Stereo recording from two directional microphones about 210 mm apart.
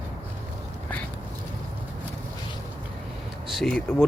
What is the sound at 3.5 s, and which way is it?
Speech, centre (ahead or behind).